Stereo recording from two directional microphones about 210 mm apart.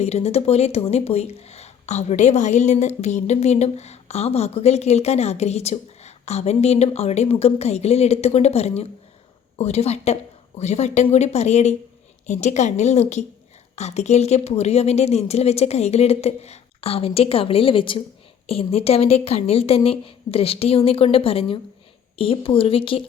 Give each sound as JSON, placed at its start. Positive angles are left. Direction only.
{"t": 0.0, "sound": "a woman's voice", "side_deg": 30}